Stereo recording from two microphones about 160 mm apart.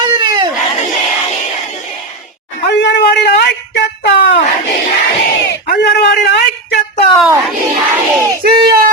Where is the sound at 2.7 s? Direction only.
90° left.